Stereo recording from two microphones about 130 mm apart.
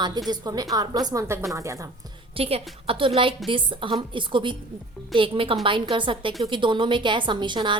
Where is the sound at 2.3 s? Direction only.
50° right (ahead or behind).